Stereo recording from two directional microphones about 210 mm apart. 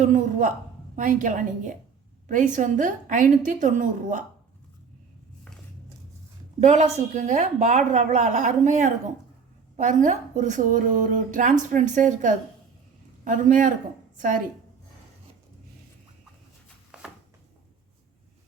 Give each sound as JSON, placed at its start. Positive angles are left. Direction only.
{"t": 0.0, "sound": "speech", "side_deg": -35}
{"t": 6.6, "sound": "speech", "side_deg": -35}
{"t": 16.9, "sound": "a sound", "side_deg": -5}